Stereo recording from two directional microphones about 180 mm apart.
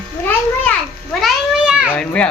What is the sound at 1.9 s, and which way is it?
Speech, 5° left (ahead or behind).